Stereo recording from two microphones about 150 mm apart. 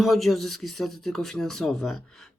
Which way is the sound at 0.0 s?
Centre (ahead or behind).